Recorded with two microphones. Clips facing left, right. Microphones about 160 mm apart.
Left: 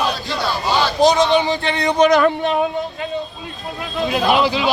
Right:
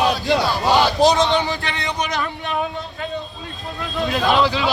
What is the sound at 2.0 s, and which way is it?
Speech, 70° left (ahead or behind).